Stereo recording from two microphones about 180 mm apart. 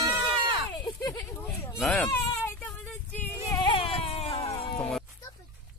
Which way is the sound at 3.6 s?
30° left (ahead or behind).